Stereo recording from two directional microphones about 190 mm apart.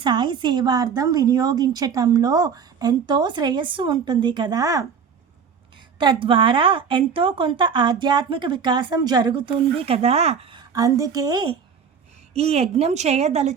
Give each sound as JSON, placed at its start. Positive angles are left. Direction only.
{"t": 0.0, "sound": "a woman's voice", "side_deg": -25}
{"t": 6.0, "sound": "a woman's voice", "side_deg": -25}
{"t": 12.3, "sound": "a woman's voice", "side_deg": -35}